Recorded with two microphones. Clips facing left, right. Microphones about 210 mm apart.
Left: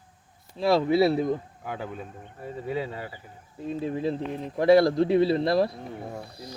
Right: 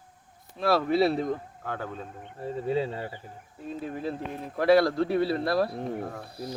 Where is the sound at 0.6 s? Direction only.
15° left (ahead or behind).